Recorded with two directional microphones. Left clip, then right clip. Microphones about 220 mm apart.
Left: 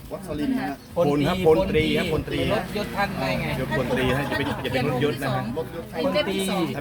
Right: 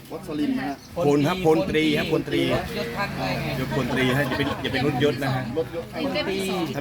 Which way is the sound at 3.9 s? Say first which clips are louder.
Right 4 dB; 50° right (ahead or behind).